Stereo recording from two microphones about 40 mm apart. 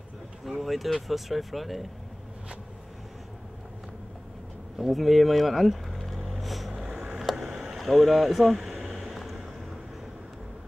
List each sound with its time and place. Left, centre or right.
0.5 s speech: centre
4.7 s vehicle: centre
6.7 s a sound: right
7.2 s vehicle: centre
7.7 s speech: centre
8.5 s a sound: centre
8.9 s vehicle: centre